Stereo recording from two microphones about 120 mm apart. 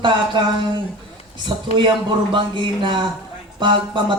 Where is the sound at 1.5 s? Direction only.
40° right (ahead or behind).